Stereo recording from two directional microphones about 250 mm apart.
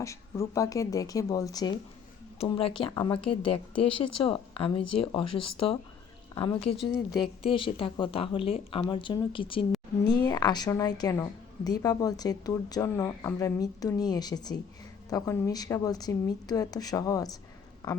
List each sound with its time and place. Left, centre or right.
0.0 s a woman's voice: centre